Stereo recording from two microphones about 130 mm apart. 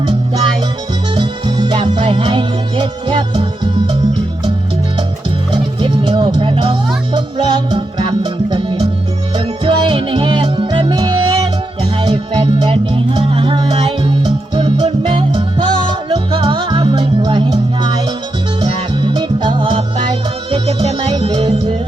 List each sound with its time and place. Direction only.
0.0 s music: 40° right (ahead or behind)
5.5 s music: 40° right (ahead or behind)